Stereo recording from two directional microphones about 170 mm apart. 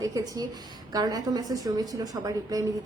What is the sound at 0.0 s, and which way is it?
A woman's voice, 20° right (ahead or behind).